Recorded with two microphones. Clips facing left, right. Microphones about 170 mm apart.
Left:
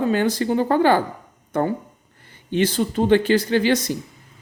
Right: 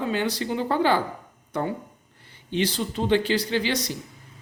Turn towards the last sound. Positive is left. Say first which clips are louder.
# left 7 dB
turn(degrees=50)  # may be behind; listen again after turning